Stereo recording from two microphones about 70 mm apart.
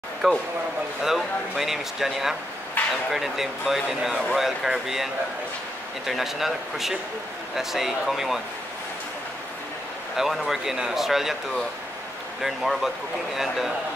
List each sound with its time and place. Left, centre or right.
0.2 s speech: centre
2.8 s a sound: left
3.1 s speech: centre
10.1 s speech: centre